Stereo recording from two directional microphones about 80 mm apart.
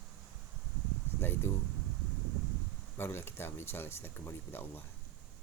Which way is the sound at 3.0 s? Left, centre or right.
Left.